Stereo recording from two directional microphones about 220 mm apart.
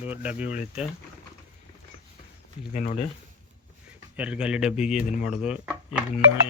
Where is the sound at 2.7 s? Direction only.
35° left (ahead or behind).